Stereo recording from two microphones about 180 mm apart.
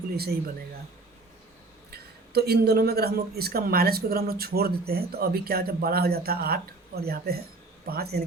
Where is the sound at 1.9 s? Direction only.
60° right (ahead or behind).